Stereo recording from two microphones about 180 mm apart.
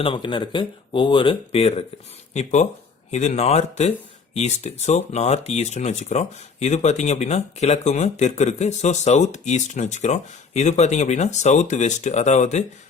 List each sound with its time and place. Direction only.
0.0 s speech: 30° left (ahead or behind)